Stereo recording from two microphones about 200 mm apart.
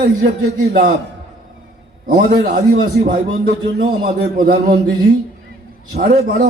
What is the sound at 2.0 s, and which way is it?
Speech, 40° right (ahead or behind).